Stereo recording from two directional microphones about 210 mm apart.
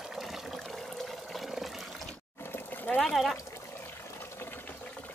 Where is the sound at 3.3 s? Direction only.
15° left (ahead or behind).